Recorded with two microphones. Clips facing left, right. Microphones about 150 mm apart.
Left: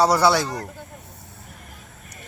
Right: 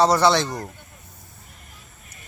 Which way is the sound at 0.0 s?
10° left (ahead or behind).